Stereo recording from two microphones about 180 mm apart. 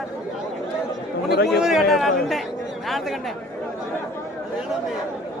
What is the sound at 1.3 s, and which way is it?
Speech, 60° left (ahead or behind).